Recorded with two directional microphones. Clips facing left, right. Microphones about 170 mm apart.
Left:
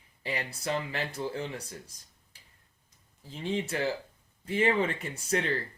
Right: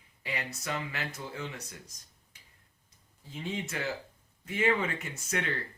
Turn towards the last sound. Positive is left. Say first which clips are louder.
# left 4 dB
turn(degrees=30)  # may be behind; listen again after turning